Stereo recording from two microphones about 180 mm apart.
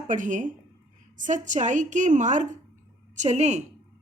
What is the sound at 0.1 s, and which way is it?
A woman's voice, 45° right (ahead or behind).